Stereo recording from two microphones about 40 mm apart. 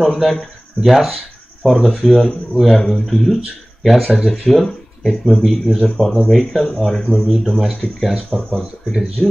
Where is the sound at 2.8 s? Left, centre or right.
Centre.